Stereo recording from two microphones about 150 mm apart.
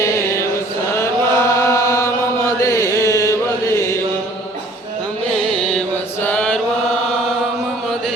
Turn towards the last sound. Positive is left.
turn(degrees=10)  # may be behind; listen again after turning